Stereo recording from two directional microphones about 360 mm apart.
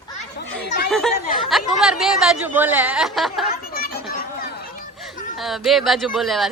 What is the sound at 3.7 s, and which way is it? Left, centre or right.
Children playing, left.